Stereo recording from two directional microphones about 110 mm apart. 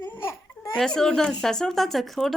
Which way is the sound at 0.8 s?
5° left (ahead or behind).